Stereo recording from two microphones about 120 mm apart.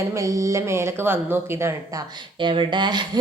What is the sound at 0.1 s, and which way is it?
Speech, 25° right (ahead or behind).